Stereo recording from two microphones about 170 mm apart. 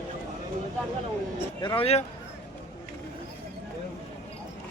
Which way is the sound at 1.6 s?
30° left (ahead or behind).